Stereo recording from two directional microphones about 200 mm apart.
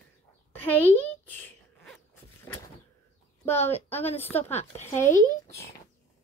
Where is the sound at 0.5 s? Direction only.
10° left (ahead or behind).